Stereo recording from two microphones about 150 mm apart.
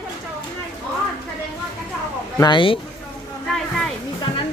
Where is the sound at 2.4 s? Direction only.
30° left (ahead or behind).